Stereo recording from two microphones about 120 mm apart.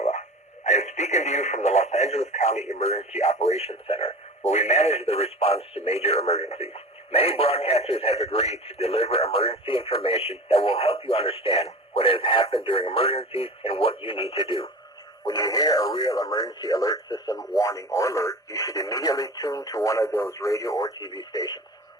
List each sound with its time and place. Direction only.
0.0 s speech: 70° left (ahead or behind); by 14.7 s 50° left (ahead or behind)
15.2 s speech: 30° left (ahead or behind)